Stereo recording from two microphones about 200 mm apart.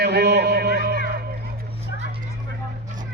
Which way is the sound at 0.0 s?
55° right (ahead or behind).